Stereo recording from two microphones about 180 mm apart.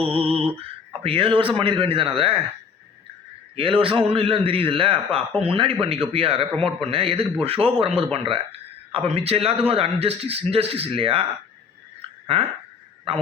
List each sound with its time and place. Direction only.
0.0 s a man's voice: 30° right (ahead or behind)
3.5 s a man's voice: 30° right (ahead or behind)